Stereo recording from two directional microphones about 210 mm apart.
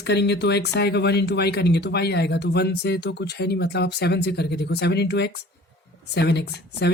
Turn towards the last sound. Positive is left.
turn(degrees=50)  # may be behind; listen again after turning